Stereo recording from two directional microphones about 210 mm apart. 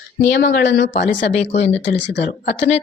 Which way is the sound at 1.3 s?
30° left (ahead or behind).